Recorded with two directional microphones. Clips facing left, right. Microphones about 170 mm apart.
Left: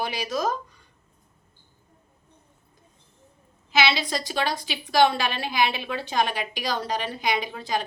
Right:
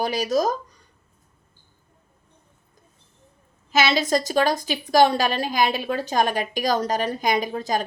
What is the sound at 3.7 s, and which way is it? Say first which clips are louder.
A woman's voice: right 4 dB; 45° right (ahead or behind).